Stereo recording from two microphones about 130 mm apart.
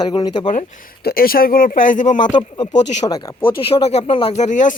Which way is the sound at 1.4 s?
90° left.